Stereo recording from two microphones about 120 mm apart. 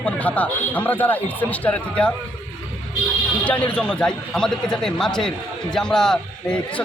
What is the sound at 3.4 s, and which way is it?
A man's voice, 10° left (ahead or behind).